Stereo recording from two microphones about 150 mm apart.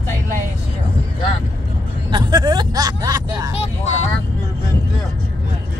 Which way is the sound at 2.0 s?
30° right (ahead or behind).